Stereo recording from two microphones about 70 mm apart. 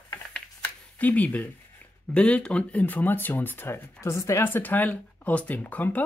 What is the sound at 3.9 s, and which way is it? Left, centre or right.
Speech, left.